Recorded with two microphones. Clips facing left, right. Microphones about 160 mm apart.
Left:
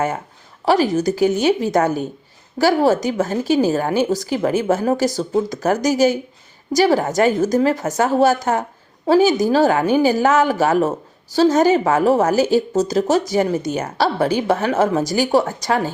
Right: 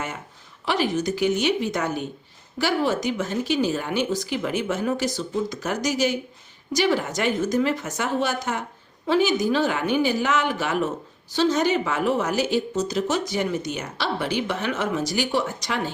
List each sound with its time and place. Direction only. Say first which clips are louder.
0.6 s a woman's voice: left 7 dB; 40° left (ahead or behind)